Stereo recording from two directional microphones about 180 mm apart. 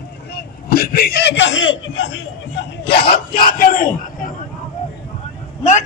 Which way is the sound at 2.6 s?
65° left (ahead or behind).